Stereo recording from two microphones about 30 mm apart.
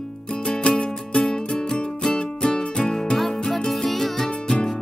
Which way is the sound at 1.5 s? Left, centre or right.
Centre.